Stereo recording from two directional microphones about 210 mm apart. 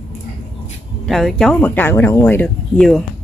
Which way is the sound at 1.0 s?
Centre (ahead or behind).